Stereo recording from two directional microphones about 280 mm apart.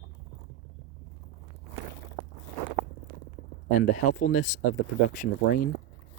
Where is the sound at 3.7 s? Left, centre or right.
Left.